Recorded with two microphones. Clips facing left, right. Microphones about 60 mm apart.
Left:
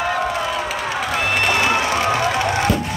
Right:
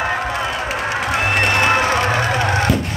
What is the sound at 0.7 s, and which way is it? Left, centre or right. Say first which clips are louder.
Run: right 2 dB; right.